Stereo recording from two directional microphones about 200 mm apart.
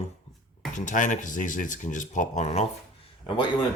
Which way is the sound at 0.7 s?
40° left (ahead or behind).